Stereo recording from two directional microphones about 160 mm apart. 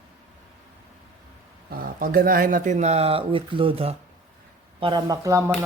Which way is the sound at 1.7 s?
65° right (ahead or behind).